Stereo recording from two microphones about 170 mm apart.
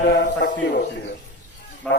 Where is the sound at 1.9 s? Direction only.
5° left (ahead or behind).